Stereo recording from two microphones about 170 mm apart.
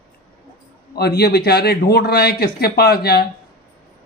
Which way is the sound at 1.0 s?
70° left (ahead or behind).